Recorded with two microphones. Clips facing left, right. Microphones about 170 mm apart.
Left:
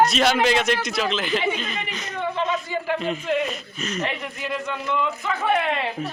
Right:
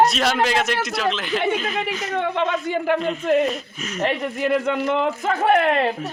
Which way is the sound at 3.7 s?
5° right (ahead or behind).